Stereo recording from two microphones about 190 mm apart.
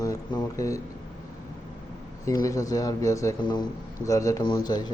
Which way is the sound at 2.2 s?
15° left (ahead or behind).